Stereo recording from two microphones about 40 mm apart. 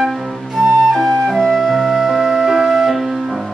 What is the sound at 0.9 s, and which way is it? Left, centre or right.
Flute, centre.